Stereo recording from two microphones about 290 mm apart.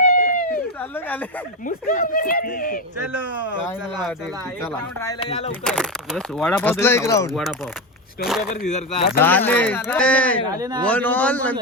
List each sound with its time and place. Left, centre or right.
0.0 s a sound: left
0.8 s speech: centre
1.6 s speech: left
3.1 s speech: centre
4.9 s speech: centre
5.6 s speech: centre
8.6 s speech: left
9.1 s speech: centre
10.5 s a man's voice: centre
10.8 s speech: centre